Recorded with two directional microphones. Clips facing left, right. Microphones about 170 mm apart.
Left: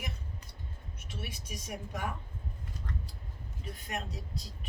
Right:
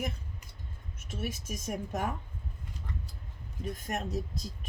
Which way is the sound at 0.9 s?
45° right (ahead or behind).